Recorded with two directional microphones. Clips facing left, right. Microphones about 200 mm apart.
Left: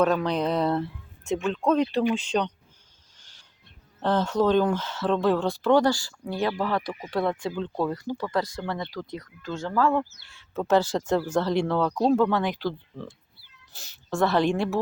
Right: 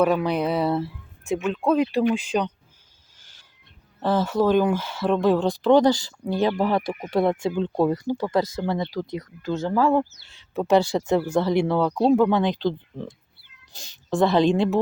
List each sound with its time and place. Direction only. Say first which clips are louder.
0.0 s speech: right 2 dB; 10° right (ahead or behind)
4.0 s speech: right 2 dB; 5° right (ahead or behind)